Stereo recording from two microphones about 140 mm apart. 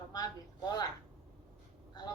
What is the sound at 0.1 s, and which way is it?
Speech, 30° left (ahead or behind).